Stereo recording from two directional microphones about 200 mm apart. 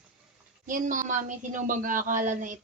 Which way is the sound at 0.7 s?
40° right (ahead or behind).